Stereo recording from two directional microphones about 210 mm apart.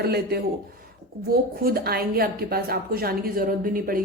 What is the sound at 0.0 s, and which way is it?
A woman's voice, 50° right (ahead or behind).